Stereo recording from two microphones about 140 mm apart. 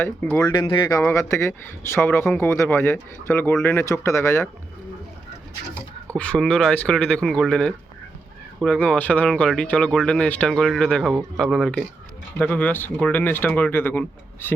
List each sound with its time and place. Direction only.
0.0 s speech: 15° left (ahead or behind)
0.4 s speech: 30° left (ahead or behind)
1.0 s speech: 20° left (ahead or behind)
6.1 s speech: 5° left (ahead or behind)